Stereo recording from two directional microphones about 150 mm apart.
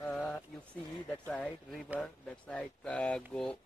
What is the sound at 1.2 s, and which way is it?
Speech, 5° left (ahead or behind).